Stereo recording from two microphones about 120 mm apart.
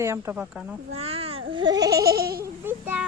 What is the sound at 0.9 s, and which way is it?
A child's voice, 55° right (ahead or behind).